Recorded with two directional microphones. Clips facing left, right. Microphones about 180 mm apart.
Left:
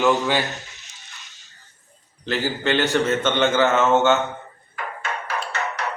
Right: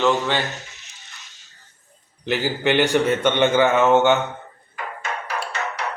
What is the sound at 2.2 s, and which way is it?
A man's voice, 15° right (ahead or behind).